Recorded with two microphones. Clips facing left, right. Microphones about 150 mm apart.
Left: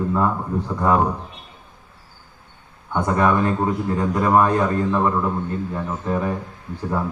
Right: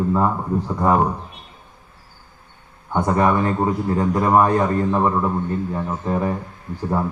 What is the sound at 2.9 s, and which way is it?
A man's voice, 20° right (ahead or behind).